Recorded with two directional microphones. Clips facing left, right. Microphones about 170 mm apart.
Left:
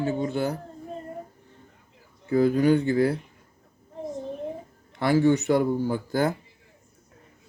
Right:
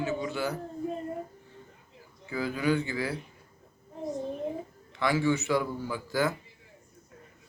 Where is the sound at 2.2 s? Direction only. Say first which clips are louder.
Left 9 dB; 45° left (ahead or behind).